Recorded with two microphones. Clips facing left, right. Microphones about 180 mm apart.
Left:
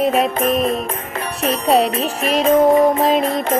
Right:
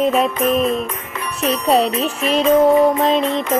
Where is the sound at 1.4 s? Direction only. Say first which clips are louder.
Even; 30° left (ahead or behind).